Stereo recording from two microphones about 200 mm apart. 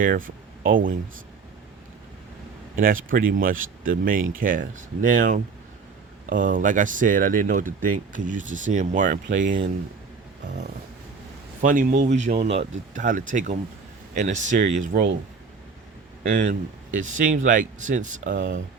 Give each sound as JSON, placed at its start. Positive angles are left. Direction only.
{"t": 0.0, "sound": "speech", "side_deg": -45}
{"t": 2.7, "sound": "speech", "side_deg": -45}
{"t": 11.6, "sound": "speech", "side_deg": -40}
{"t": 16.3, "sound": "speech", "side_deg": -40}